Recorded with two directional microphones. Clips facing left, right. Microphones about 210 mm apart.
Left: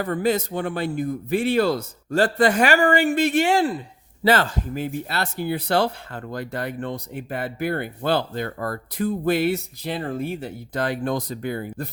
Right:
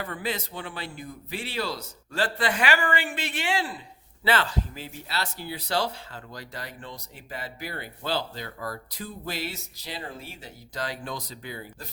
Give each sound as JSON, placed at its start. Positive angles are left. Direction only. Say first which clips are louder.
{"t": 0.0, "sound": "speech", "louder": "left 10 dB", "side_deg": 45}